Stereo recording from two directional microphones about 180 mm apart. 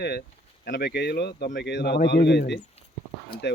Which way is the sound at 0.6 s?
65° left (ahead or behind).